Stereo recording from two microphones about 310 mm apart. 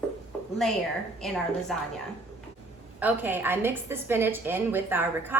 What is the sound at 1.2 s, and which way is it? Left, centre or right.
Speech, centre.